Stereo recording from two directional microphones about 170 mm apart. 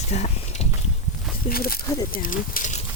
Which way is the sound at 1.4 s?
60° left (ahead or behind).